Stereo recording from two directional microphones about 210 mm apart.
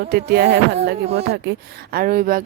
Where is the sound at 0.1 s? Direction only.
50° right (ahead or behind).